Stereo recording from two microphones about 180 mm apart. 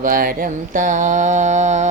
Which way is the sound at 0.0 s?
50° right (ahead or behind).